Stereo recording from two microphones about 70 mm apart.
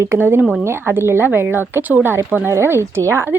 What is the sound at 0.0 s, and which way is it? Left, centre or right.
A woman's voice, right.